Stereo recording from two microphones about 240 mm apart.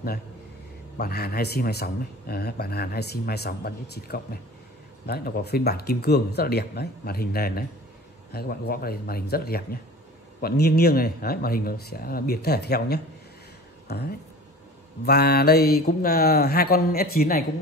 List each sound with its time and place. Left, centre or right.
0.9 s a man's voice: left